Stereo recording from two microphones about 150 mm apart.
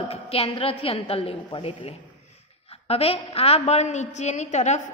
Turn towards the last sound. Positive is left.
turn(degrees=50)  # may be behind; listen again after turning